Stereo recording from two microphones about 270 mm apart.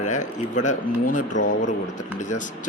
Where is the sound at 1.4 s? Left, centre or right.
Left.